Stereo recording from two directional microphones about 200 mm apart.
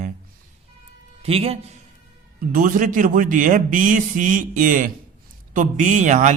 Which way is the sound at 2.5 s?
40° right (ahead or behind).